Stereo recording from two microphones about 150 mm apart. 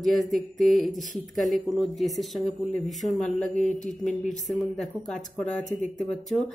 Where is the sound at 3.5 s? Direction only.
55° left (ahead or behind).